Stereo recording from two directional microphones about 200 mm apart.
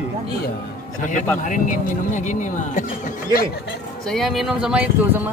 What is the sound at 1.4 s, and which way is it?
Speech, 40° left (ahead or behind).